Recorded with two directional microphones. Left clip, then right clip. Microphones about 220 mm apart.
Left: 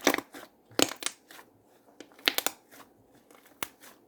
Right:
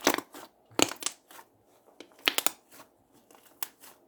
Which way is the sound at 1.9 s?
5° right (ahead or behind).